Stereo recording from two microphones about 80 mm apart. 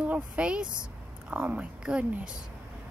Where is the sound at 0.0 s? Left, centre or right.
Centre.